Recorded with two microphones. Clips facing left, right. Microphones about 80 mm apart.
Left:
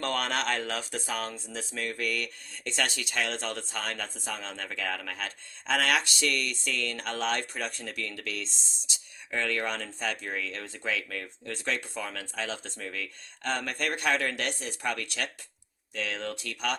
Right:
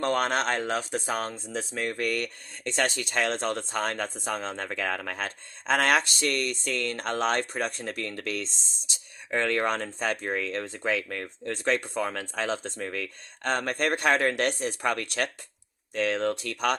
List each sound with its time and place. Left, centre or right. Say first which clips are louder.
0.0 s speech: right 4 dB; right